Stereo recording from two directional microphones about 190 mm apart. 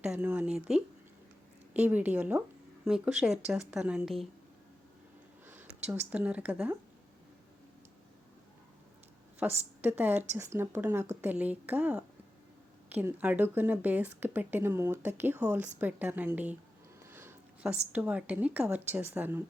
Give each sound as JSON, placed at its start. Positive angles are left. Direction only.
{"t": 0.0, "sound": "a woman's voice", "side_deg": -5}
{"t": 5.5, "sound": "speech", "side_deg": -10}
{"t": 9.4, "sound": "a woman's voice", "side_deg": -10}
{"t": 17.1, "sound": "a sound", "side_deg": -10}
{"t": 17.9, "sound": "a woman's voice", "side_deg": -5}